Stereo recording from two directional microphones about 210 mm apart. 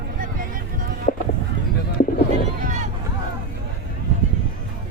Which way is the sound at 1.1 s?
40° left (ahead or behind).